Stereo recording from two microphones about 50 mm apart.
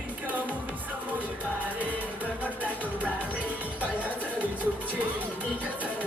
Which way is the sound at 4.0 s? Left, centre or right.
Right.